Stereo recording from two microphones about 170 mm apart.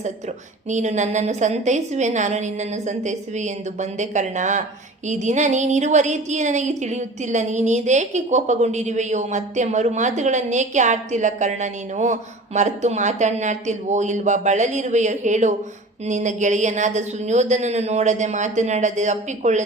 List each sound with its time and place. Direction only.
0.7 s a woman's voice: 45° right (ahead or behind)